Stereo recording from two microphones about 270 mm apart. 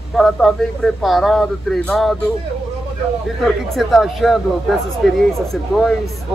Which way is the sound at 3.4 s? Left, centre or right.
Centre.